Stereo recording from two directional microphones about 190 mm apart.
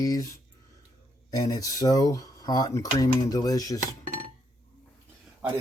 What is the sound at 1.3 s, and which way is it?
Speech, 20° left (ahead or behind).